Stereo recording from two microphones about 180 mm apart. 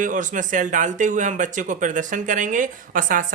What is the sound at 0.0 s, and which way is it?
Speech, 45° right (ahead or behind).